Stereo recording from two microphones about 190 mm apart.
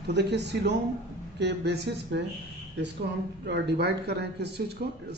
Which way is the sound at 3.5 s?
60° right (ahead or behind).